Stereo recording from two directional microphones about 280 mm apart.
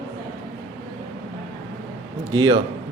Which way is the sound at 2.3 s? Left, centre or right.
Centre.